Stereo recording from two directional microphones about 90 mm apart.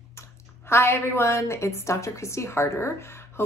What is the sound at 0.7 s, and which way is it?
A woman's voice, 25° left (ahead or behind).